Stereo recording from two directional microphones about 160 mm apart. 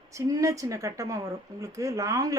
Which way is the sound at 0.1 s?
20° right (ahead or behind).